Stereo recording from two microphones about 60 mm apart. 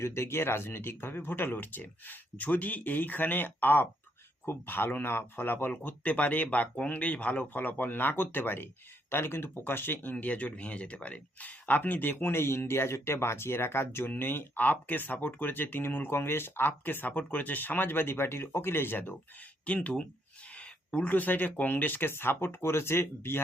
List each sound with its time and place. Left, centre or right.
0.0 s speech: left
19.6 s speech: left